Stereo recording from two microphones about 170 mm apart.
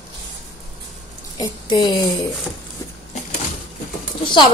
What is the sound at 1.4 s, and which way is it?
Speech, 25° left (ahead or behind).